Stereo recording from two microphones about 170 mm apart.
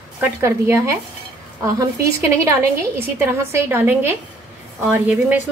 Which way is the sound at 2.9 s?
15° right (ahead or behind).